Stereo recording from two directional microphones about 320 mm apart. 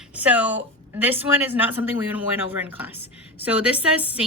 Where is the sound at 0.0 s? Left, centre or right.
Centre.